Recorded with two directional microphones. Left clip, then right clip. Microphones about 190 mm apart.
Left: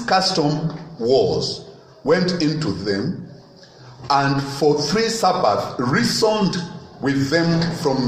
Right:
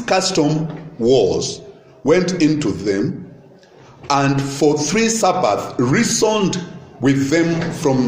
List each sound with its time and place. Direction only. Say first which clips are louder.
0.0 s a man's voice: right 1 dB; 55° right (ahead or behind)
4.1 s a man's voice: right 1 dB; 55° right (ahead or behind)